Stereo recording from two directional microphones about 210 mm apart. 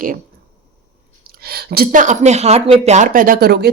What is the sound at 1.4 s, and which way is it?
Speech, 45° right (ahead or behind).